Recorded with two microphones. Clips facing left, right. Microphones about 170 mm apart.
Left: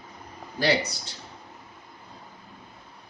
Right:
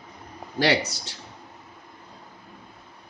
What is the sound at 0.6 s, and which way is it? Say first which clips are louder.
Speech: right 2 dB; 75° right (ahead or behind).